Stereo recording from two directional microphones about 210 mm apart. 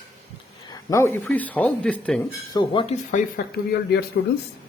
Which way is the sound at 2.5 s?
25° left (ahead or behind).